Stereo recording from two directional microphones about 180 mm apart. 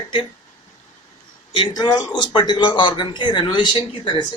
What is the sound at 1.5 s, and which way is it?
Speech, 25° left (ahead or behind).